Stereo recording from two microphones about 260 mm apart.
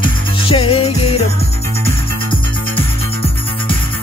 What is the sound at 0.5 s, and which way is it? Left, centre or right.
Music, centre.